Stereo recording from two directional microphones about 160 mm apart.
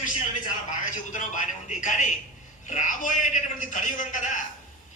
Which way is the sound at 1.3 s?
50° left (ahead or behind).